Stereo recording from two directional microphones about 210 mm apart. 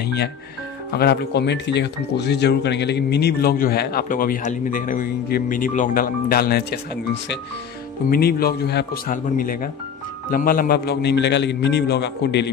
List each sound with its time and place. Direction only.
0.0 s speech: 50° left (ahead or behind)
8.1 s speech: 50° left (ahead or behind)